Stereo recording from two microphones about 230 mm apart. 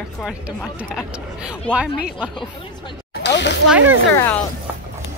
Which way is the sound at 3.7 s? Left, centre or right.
Centre.